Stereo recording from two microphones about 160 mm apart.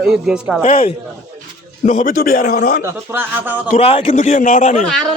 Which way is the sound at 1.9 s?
60° left (ahead or behind).